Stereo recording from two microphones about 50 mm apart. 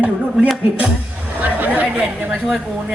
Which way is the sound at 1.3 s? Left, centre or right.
Right.